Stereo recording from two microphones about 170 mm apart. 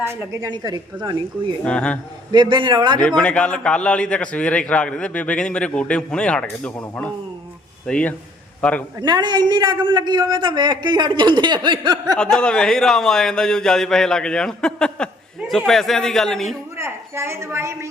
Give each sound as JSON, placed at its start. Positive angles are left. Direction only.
{"t": 0.0, "sound": "a woman's voice", "side_deg": -15}
{"t": 0.5, "sound": "a man's voice", "side_deg": -25}
{"t": 1.6, "sound": "a man's voice", "side_deg": 5}
{"t": 2.3, "sound": "a man's voice", "side_deg": -25}
{"t": 3.2, "sound": "a man's voice", "side_deg": 5}
{"t": 9.0, "sound": "a man's voice", "side_deg": -25}
{"t": 12.1, "sound": "a man's voice", "side_deg": 5}
{"t": 16.7, "sound": "a woman's voice", "side_deg": -15}